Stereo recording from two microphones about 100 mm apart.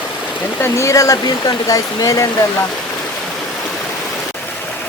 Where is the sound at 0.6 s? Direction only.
30° left (ahead or behind).